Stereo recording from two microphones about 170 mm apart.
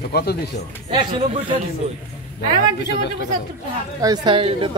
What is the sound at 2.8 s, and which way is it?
Speech, 90° left.